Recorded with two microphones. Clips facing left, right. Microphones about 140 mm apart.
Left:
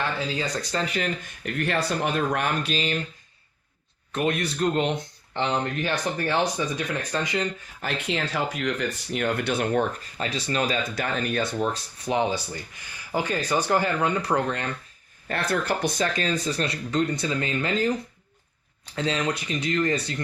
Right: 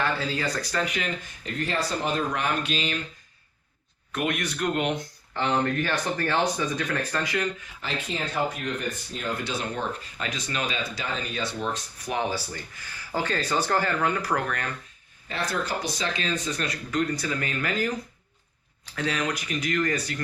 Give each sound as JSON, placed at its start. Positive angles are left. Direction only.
{"t": 0.2, "sound": "speech", "side_deg": 20}
{"t": 2.1, "sound": "speech", "side_deg": 50}
{"t": 4.1, "sound": "speech", "side_deg": 30}
{"t": 7.8, "sound": "speech", "side_deg": 65}
{"t": 10.2, "sound": "speech", "side_deg": 35}
{"t": 10.9, "sound": "speech", "side_deg": 55}
{"t": 12.0, "sound": "speech", "side_deg": 20}
{"t": 15.3, "sound": "speech", "side_deg": 55}
{"t": 18.9, "sound": "speech", "side_deg": 25}